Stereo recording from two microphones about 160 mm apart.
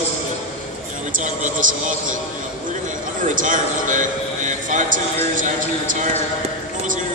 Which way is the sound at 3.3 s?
55° right (ahead or behind).